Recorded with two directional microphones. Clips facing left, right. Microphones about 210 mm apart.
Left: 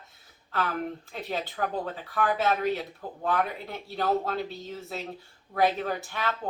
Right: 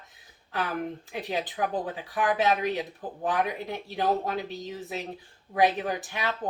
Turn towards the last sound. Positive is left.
turn(degrees=-15)  # may be behind; listen again after turning